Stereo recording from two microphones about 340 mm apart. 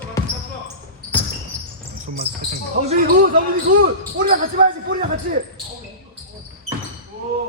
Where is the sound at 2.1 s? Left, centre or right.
Right.